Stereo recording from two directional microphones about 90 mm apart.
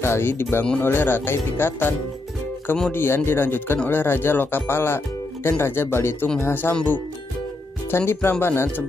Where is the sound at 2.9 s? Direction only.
25° left (ahead or behind).